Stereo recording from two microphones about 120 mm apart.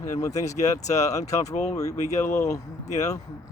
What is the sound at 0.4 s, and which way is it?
Speech, 70° left (ahead or behind).